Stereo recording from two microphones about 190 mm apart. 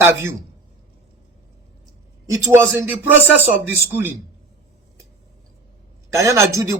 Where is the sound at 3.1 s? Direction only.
10° right (ahead or behind).